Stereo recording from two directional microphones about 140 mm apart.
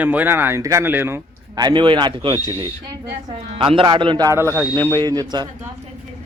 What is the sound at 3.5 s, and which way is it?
Speech, 40° right (ahead or behind).